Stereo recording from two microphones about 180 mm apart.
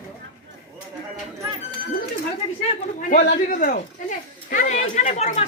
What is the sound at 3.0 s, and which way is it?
A man's voice, 50° left (ahead or behind).